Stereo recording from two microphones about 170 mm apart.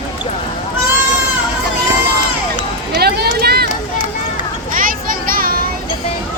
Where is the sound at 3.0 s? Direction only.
70° right (ahead or behind).